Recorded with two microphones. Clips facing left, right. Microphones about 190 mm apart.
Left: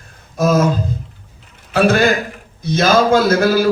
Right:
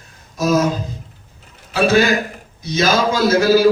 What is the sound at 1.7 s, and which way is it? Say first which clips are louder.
A man's voice: left 1 dB; 55° left (ahead or behind).